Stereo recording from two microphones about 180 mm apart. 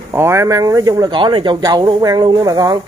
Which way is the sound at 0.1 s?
15° right (ahead or behind).